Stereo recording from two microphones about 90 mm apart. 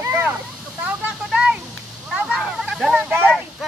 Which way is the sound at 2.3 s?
5° right (ahead or behind).